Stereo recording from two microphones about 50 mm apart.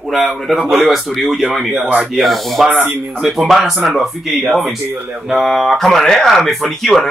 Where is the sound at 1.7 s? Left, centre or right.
Right.